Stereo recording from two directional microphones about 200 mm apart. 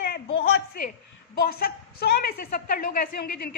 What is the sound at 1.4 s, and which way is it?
A woman's voice, 50° left (ahead or behind).